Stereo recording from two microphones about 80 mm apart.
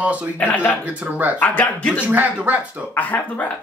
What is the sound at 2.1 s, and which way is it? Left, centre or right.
Speech, right.